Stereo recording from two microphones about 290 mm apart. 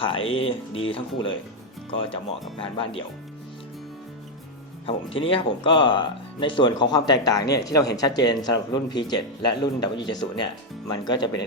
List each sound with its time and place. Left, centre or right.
0.3 s speech: centre
2.6 s speech: centre
4.9 s speech: centre